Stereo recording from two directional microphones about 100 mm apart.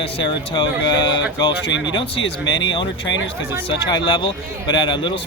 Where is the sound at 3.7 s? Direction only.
50° left (ahead or behind).